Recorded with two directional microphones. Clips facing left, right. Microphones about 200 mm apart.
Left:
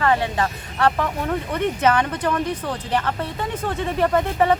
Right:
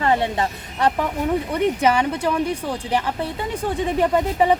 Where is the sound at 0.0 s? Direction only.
20° right (ahead or behind).